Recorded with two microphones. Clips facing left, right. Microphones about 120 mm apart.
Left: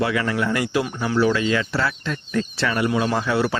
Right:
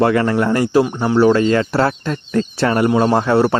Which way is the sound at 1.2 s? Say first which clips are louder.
Right 7 dB; 40° right (ahead or behind).